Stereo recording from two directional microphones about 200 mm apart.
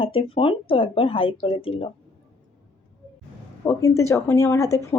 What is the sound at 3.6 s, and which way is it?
Speech, 15° left (ahead or behind).